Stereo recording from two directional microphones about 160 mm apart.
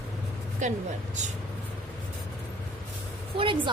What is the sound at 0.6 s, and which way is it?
Speech, 50° right (ahead or behind).